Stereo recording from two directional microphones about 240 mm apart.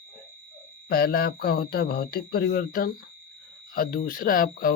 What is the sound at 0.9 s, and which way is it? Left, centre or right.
Speech, left.